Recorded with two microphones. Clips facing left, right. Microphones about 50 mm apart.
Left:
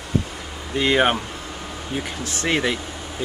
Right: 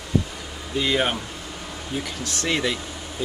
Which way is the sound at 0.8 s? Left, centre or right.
Left.